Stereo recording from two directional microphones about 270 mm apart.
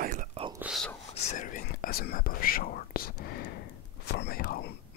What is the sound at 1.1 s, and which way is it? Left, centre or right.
Whispering, left.